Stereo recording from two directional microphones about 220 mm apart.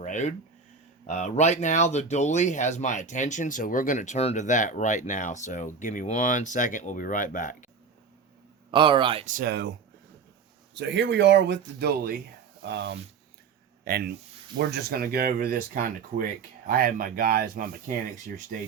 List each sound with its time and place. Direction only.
0.0 s a sound: 35° left (ahead or behind)
1.0 s speech: 30° left (ahead or behind)
8.7 s speech: 20° right (ahead or behind)
9.2 s speech: 40° right (ahead or behind)
10.8 s speech: 55° right (ahead or behind)